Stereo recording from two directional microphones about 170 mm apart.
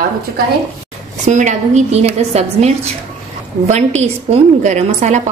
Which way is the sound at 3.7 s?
40° right (ahead or behind).